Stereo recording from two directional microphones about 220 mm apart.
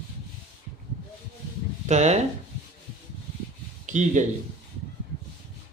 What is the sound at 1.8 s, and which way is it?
Speech, 30° right (ahead or behind).